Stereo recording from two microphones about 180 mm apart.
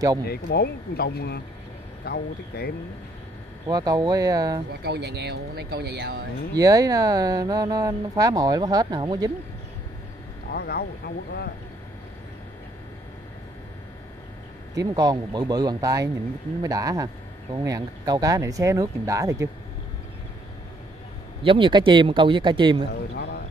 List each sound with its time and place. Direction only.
0.3 s speech: 60° left (ahead or behind)
3.6 s speech: 20° right (ahead or behind)
4.8 s speech: 65° right (ahead or behind)
6.5 s speech: 20° right (ahead or behind)
10.5 s speech: 60° left (ahead or behind)
14.8 s speech: 20° right (ahead or behind)
21.5 s speech: 30° right (ahead or behind)
23.1 s speech: 65° left (ahead or behind)